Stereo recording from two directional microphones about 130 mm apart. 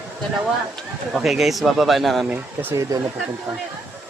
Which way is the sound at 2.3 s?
20° right (ahead or behind).